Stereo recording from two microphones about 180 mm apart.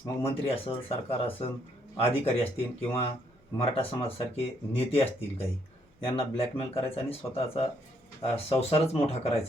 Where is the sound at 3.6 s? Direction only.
30° left (ahead or behind).